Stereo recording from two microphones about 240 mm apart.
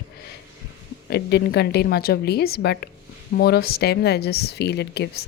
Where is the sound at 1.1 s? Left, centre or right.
Left.